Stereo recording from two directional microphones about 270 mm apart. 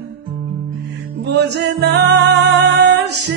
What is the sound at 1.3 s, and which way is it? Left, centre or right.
Music, right.